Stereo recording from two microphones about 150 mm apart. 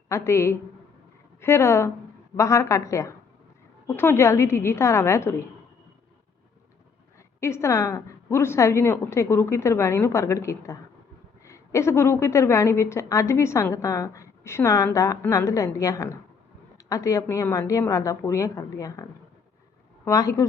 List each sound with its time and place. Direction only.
0.1 s a woman's voice: 20° left (ahead or behind)
7.3 s a woman's voice: 20° left (ahead or behind)
20.1 s a woman's voice: 20° left (ahead or behind)